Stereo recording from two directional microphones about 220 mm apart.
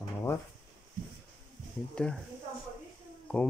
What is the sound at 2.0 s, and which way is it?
Speech, 5° left (ahead or behind).